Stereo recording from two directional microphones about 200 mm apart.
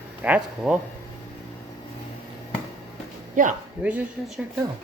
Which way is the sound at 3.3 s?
40° right (ahead or behind).